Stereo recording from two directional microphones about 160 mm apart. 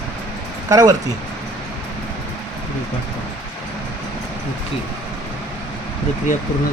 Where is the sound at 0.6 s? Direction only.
20° right (ahead or behind).